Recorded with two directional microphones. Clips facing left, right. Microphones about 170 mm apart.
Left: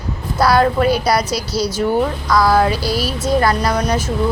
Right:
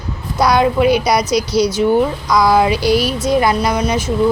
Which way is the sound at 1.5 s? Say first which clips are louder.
Right 4 dB; 10° left (ahead or behind).